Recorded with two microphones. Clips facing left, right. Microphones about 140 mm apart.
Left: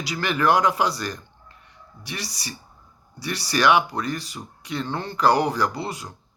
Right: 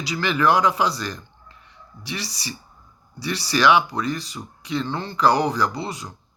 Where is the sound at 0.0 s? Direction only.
50° left (ahead or behind).